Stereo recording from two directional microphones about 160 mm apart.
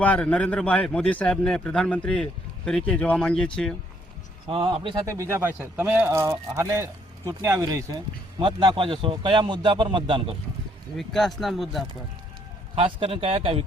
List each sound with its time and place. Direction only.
0.0 s a man's voice: 10° left (ahead or behind)
4.4 s a man's voice: 35° right (ahead or behind)
5.0 s speech: 20° right (ahead or behind)
8.4 s a man's voice: 30° right (ahead or behind)
10.9 s speech: centre (ahead or behind)
12.7 s a man's voice: 35° right (ahead or behind)